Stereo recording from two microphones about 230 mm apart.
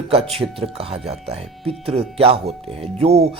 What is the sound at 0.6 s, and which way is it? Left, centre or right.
A man's voice, right.